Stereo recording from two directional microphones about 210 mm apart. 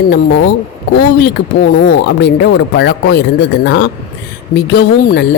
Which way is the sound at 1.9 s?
50° left (ahead or behind).